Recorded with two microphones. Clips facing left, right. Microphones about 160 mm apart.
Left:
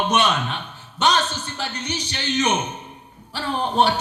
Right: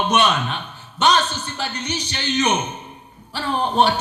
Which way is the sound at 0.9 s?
65° right (ahead or behind).